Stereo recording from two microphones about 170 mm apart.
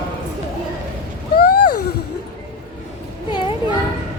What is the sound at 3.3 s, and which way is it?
Children playing, 30° left (ahead or behind).